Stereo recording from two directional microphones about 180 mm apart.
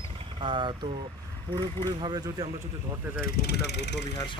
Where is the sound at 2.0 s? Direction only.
20° right (ahead or behind).